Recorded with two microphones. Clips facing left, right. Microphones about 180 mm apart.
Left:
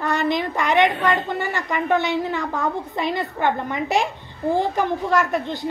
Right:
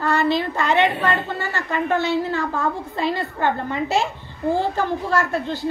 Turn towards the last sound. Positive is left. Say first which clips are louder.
# even
turn(degrees=20)  # may be behind; listen again after turning